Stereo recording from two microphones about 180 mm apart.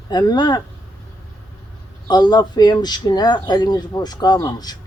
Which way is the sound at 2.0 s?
25° left (ahead or behind).